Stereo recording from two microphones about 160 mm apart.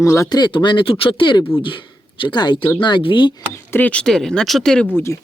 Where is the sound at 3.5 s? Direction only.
10° left (ahead or behind).